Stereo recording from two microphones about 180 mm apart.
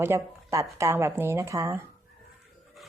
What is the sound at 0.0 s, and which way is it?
Speech, 15° right (ahead or behind).